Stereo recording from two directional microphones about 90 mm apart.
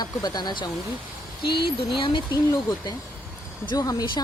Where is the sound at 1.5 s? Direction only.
70° left (ahead or behind).